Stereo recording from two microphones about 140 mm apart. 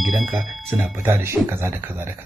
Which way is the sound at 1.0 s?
15° right (ahead or behind).